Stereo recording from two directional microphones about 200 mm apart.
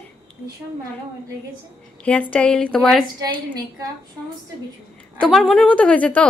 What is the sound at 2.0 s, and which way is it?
A woman's voice, 5° left (ahead or behind).